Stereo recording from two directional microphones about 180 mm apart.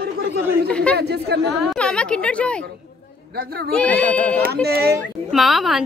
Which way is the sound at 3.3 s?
60° right (ahead or behind).